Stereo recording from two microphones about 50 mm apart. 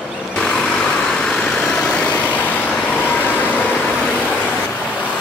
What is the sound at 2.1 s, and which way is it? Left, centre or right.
Vehicle, left.